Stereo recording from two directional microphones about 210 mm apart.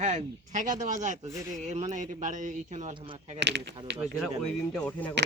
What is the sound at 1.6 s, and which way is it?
Speech, 35° right (ahead or behind).